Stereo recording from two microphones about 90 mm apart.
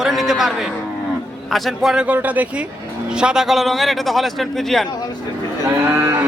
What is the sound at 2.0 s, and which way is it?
A man's voice, 15° right (ahead or behind).